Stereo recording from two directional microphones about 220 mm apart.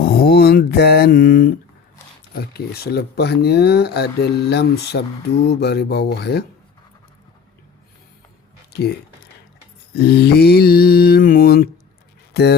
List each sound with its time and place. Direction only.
0.0 s mantra: 45° left (ahead or behind)
2.3 s speech: 45° left (ahead or behind)
9.9 s speech: 45° left (ahead or behind)